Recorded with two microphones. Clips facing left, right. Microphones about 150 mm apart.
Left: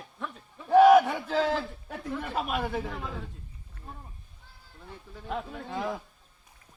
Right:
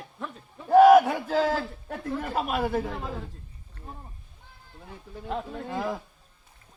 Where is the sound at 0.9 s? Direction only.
10° right (ahead or behind).